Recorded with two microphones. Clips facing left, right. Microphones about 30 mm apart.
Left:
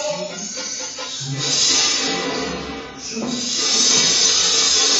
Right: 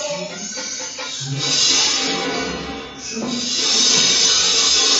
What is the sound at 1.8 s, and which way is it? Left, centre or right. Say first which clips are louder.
Music: right 1 dB; right.